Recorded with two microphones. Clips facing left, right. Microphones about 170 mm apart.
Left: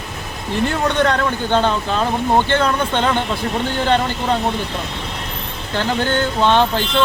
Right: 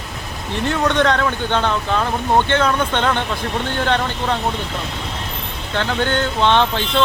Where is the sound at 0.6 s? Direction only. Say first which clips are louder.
Right 1 dB; 5° left (ahead or behind).